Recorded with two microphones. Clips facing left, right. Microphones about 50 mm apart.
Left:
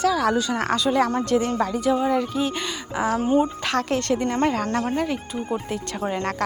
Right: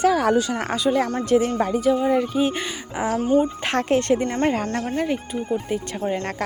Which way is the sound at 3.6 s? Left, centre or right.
Right.